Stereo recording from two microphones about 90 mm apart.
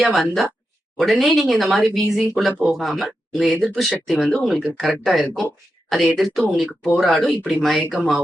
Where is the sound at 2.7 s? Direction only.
Centre (ahead or behind).